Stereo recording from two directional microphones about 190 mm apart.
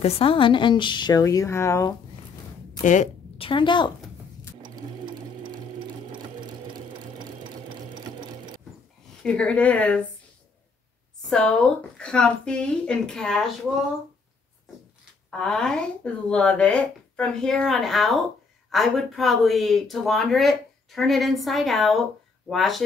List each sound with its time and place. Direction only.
0.0 s a woman's voice: 30° left (ahead or behind)
2.8 s a woman's voice: 40° left (ahead or behind); by 3.9 s 25° left (ahead or behind)
4.7 s sewing machine: 25° right (ahead or behind)
9.2 s speech: 5° left (ahead or behind)
11.2 s speech: 5° left (ahead or behind)
15.3 s speech: 5° left (ahead or behind)